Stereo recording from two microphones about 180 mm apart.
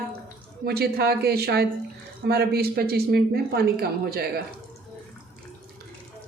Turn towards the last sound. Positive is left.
turn(degrees=-60)  # may be behind; listen again after turning